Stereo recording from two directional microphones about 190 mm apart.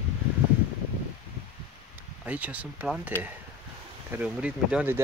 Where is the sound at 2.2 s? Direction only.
10° right (ahead or behind).